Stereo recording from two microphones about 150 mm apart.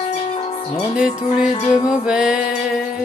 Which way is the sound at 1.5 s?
30° left (ahead or behind).